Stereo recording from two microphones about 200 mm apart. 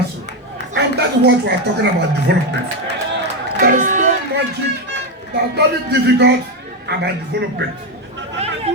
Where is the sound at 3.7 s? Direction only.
40° right (ahead or behind).